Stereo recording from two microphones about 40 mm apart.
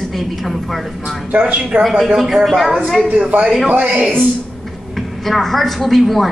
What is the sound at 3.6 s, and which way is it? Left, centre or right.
Speech, right.